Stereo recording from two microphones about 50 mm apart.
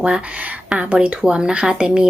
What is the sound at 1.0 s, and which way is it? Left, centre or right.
A woman's voice, centre.